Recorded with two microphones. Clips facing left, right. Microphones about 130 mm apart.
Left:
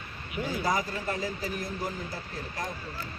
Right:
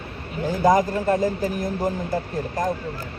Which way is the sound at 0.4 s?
45° right (ahead or behind).